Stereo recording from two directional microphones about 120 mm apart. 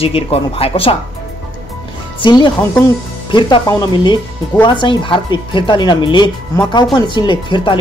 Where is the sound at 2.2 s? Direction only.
40° left (ahead or behind).